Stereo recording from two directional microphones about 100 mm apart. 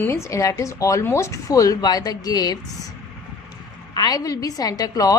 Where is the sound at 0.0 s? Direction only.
25° left (ahead or behind).